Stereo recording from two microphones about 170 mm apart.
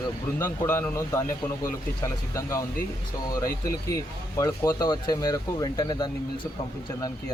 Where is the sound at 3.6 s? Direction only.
20° left (ahead or behind).